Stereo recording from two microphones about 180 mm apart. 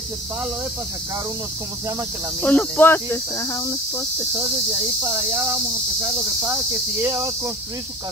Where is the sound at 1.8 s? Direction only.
20° right (ahead or behind).